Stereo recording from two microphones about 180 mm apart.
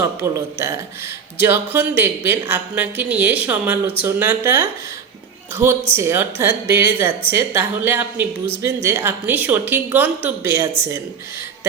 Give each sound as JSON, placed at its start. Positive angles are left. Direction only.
{"t": 0.0, "sound": "a woman's voice", "side_deg": -15}
{"t": 5.9, "sound": "a woman's voice", "side_deg": -15}